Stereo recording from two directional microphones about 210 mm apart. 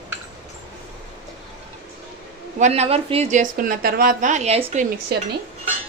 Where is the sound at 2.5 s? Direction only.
30° right (ahead or behind).